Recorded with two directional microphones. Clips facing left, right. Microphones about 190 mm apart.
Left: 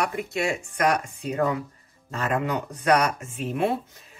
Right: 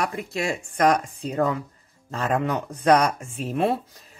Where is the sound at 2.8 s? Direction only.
35° right (ahead or behind).